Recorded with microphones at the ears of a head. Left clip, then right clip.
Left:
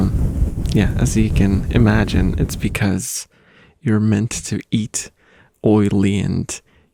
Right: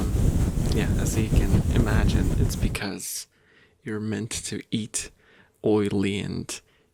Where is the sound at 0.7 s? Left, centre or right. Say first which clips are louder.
Left 9 dB; left.